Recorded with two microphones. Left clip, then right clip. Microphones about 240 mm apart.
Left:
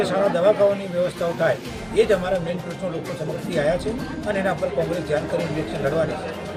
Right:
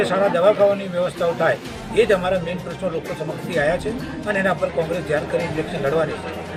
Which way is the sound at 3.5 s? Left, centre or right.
Centre.